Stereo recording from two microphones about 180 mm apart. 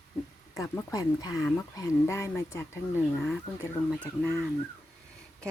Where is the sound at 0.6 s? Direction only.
20° left (ahead or behind).